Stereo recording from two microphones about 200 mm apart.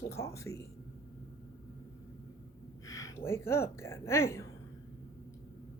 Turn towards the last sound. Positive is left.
turn(degrees=15)  # may be behind; listen again after turning